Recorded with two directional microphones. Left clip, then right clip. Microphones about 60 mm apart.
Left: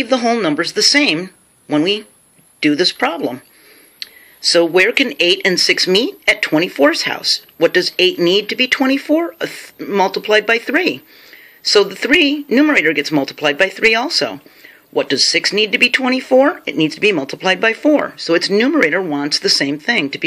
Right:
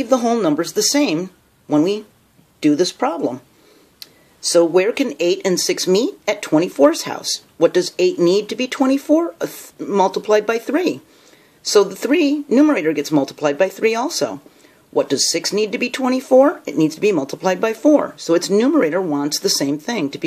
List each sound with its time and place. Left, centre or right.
0.0 s speech: right
4.0 s a sound: right
4.6 s speech: centre
5.1 s speech: right
19.2 s speech: right